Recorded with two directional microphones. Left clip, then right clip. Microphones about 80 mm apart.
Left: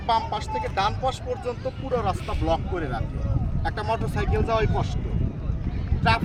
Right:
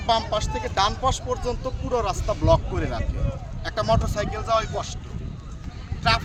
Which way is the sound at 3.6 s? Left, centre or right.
Right.